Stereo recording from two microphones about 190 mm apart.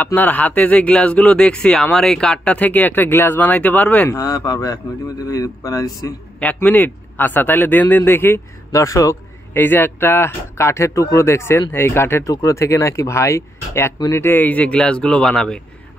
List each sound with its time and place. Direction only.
0.0 s a man's voice: 10° left (ahead or behind)
6.4 s a man's voice: 10° left (ahead or behind)